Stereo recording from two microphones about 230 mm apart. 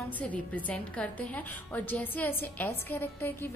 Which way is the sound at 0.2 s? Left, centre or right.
Centre.